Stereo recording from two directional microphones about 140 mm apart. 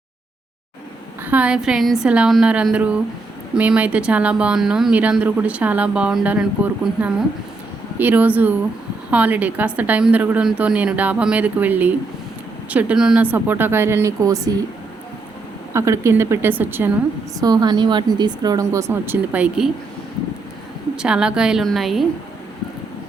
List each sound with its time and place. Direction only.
1.2 s speech: 10° right (ahead or behind)
15.7 s speech: 20° right (ahead or behind)
17.4 s a woman's voice: 30° right (ahead or behind); by 19.7 s 5° right (ahead or behind)
20.9 s a woman's voice: 5° right (ahead or behind)